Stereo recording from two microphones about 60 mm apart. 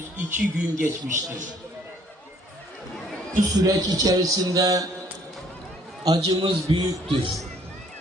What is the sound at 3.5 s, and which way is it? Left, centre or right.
A man's voice, right.